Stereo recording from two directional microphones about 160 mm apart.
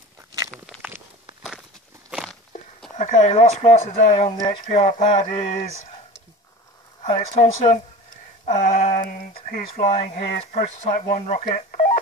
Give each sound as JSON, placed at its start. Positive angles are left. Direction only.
{"t": 2.0, "sound": "walk", "side_deg": -5}
{"t": 3.0, "sound": "speech", "side_deg": 50}
{"t": 4.3, "sound": "speech", "side_deg": 30}
{"t": 4.6, "sound": "speech", "side_deg": 50}
{"t": 7.0, "sound": "speech", "side_deg": 35}
{"t": 8.5, "sound": "a sound", "side_deg": 50}
{"t": 9.8, "sound": "speech", "side_deg": 50}